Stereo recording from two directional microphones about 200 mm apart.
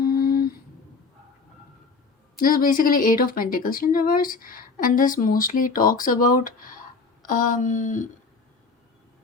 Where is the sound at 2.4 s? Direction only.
45° left (ahead or behind).